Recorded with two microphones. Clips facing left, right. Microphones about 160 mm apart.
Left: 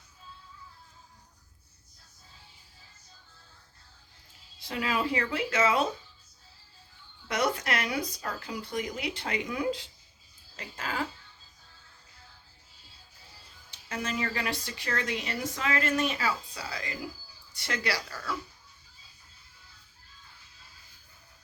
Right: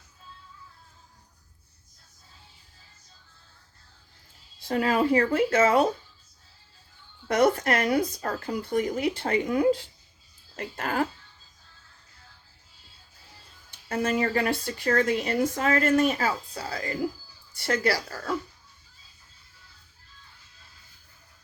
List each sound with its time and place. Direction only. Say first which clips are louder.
4.7 s speech: right 7 dB; 45° right (ahead or behind)
7.3 s speech: right 7 dB; 50° right (ahead or behind)
13.7 s speech: right 8 dB; 50° right (ahead or behind)